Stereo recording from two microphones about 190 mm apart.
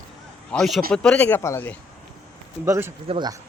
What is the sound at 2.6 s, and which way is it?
Speech, 10° right (ahead or behind).